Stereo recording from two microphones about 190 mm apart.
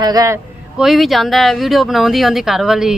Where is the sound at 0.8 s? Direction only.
Centre (ahead or behind).